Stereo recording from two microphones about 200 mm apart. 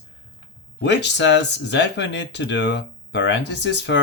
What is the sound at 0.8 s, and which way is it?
Speech, 60° left (ahead or behind).